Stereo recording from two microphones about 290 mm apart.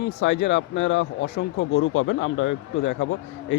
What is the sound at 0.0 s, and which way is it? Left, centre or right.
Speech, left.